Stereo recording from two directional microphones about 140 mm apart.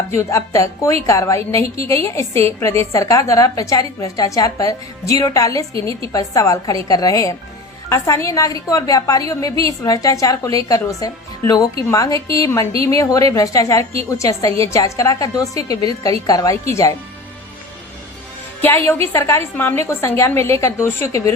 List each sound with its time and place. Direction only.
0.1 s a woman's voice: 20° left (ahead or behind)
18.6 s a woman's voice: 15° left (ahead or behind)